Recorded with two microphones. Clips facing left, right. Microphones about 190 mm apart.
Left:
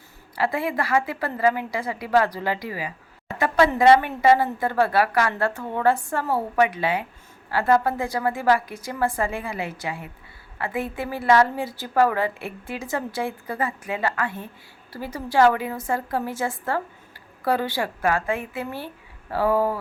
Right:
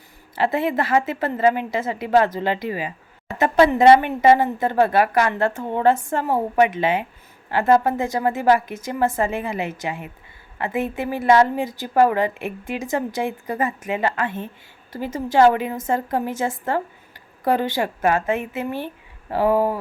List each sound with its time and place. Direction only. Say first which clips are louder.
0.3 s a woman's voice: right 4 dB; 25° right (ahead or behind)